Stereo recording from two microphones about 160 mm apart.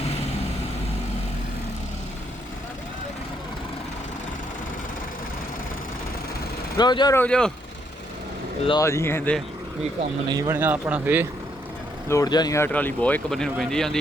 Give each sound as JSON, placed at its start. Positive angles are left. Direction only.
{"t": 6.7, "sound": "speech", "side_deg": 25}
{"t": 7.2, "sound": "speech", "side_deg": 5}
{"t": 8.8, "sound": "speech", "side_deg": 15}
{"t": 10.2, "sound": "speech", "side_deg": -25}
{"t": 10.5, "sound": "speech", "side_deg": -10}
{"t": 12.0, "sound": "speech", "side_deg": 20}